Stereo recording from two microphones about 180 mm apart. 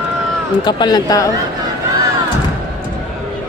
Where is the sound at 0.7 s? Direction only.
25° left (ahead or behind).